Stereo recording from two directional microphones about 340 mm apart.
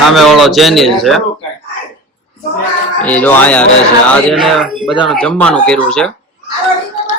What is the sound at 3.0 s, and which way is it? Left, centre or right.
A man's voice, centre.